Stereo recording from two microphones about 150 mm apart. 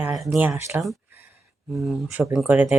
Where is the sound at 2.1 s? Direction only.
10° right (ahead or behind).